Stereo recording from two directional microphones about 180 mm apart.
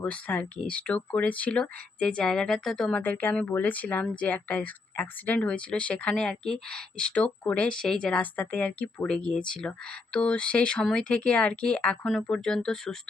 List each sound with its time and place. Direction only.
0.0 s speech: 10° left (ahead or behind)